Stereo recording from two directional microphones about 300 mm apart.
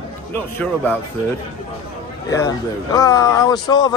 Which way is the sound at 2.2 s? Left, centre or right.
Centre.